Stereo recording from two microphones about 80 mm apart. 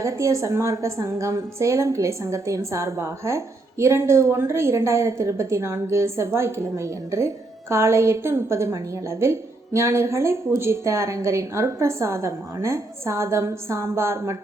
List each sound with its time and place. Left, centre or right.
0.0 s a woman's voice: right